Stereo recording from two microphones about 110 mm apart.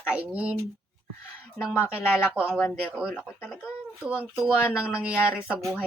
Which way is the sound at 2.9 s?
5° right (ahead or behind).